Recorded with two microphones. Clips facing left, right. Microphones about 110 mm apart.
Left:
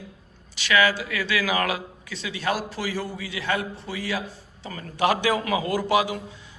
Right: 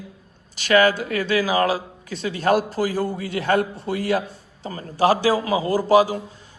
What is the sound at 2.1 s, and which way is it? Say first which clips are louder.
A man's voice: right 8 dB; 45° right (ahead or behind).